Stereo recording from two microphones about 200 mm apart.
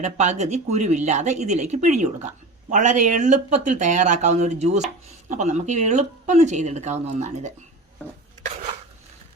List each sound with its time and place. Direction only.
0.0 s speech: 35° right (ahead or behind)